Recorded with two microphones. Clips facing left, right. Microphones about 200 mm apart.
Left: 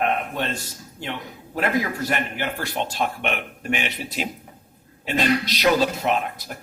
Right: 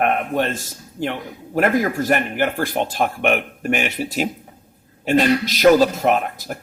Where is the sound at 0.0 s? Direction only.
50° right (ahead or behind).